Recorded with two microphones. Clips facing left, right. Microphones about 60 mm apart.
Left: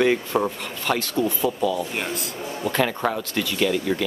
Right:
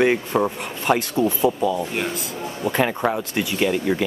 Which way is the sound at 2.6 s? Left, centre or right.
Centre.